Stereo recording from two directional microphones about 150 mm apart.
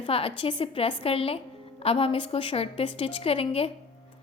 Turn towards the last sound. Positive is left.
turn(degrees=40)  # may be behind; listen again after turning